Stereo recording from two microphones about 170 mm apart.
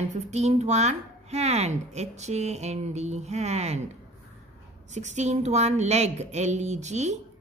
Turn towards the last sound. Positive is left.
turn(degrees=-40)  # may be behind; listen again after turning